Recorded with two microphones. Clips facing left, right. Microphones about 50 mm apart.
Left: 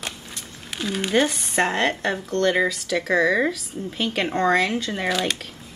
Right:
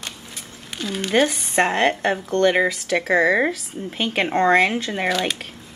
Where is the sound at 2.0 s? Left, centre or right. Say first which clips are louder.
Right 3 dB; right.